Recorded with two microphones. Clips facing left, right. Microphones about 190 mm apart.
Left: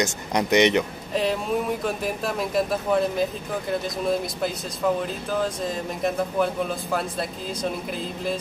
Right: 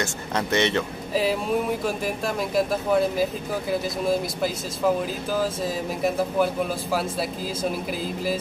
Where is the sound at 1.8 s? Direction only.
Centre (ahead or behind).